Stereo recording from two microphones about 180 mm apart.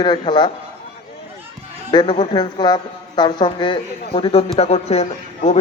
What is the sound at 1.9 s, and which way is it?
A woman's voice, 25° left (ahead or behind).